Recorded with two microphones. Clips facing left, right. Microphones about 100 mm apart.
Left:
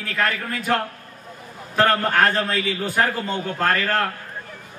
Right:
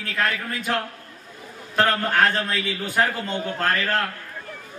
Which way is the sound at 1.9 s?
45° left (ahead or behind).